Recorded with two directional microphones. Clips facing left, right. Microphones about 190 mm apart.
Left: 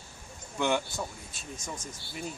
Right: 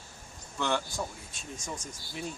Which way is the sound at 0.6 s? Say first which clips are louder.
Left 3 dB; 15° left (ahead or behind).